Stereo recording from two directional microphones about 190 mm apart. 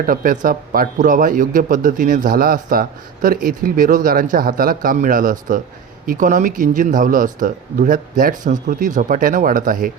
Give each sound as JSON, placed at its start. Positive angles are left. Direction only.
{"t": 0.0, "sound": "speech", "side_deg": -45}